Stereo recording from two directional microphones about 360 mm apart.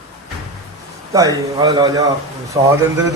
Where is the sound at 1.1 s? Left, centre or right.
Centre.